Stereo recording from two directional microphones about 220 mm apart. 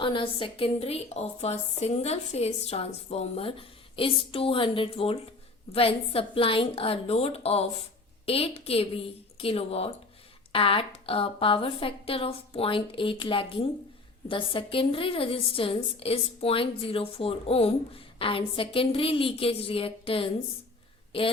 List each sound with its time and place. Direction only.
0.0 s a woman's voice: 25° left (ahead or behind)